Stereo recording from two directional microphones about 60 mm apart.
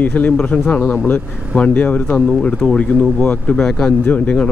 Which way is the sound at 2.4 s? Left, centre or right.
Centre.